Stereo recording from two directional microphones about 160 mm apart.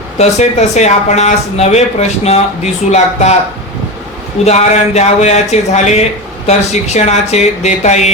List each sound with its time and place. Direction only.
0.2 s speech: 45° left (ahead or behind)
4.4 s speech: 45° left (ahead or behind)